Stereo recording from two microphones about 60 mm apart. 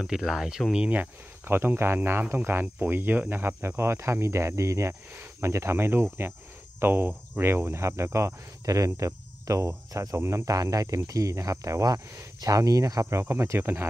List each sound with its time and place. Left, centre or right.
0.0 s speech: centre
1.4 s speech: right
8.6 s speech: right
10.1 s speech: right
10.4 s speech: right